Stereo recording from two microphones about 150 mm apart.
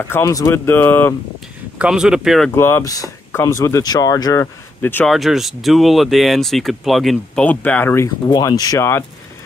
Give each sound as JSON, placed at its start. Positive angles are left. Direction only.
{"t": 0.1, "sound": "speech", "side_deg": 25}
{"t": 1.8, "sound": "speech", "side_deg": -5}
{"t": 2.5, "sound": "speech", "side_deg": 15}
{"t": 5.0, "sound": "speech", "side_deg": 0}